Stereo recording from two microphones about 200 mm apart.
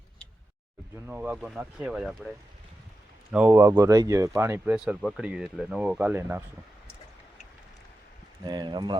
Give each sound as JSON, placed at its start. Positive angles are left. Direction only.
{"t": 1.0, "sound": "speech", "side_deg": -5}
{"t": 3.3, "sound": "speech", "side_deg": -10}
{"t": 8.4, "sound": "speech", "side_deg": -20}